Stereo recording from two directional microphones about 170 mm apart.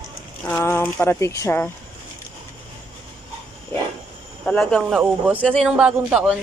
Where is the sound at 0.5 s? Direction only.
15° left (ahead or behind).